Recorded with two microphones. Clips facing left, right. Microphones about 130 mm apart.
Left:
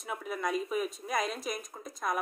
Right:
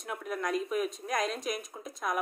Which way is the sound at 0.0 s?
Centre (ahead or behind).